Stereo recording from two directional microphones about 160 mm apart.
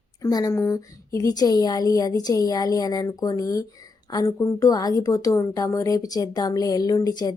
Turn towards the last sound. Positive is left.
turn(degrees=25)  # may be behind; listen again after turning